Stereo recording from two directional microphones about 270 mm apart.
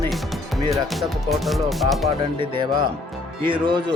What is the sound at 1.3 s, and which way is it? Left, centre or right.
Speech, centre.